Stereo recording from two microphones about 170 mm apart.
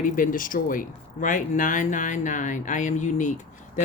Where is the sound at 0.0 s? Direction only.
55° left (ahead or behind).